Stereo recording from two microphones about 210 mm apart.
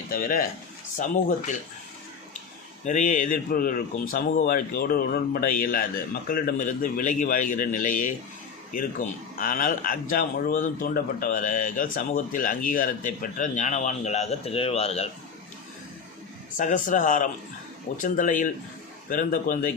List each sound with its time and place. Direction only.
0.1 s speech: 40° left (ahead or behind)
2.8 s speech: 35° left (ahead or behind)
9.4 s speech: 40° left (ahead or behind)
16.6 s speech: 35° left (ahead or behind)